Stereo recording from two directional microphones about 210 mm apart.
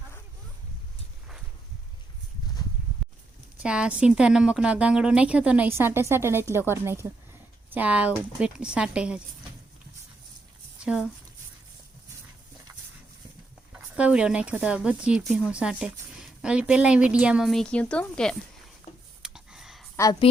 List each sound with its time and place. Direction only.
3.0 s a sound: centre (ahead or behind)
3.6 s speech: 5° right (ahead or behind)
10.8 s speech: 5° right (ahead or behind)
13.7 s speech: 5° right (ahead or behind)
19.2 s a sound: 5° right (ahead or behind)
20.0 s a woman's voice: 15° left (ahead or behind)